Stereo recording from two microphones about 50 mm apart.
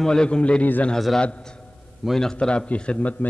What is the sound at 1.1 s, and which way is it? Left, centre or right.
Speech, centre.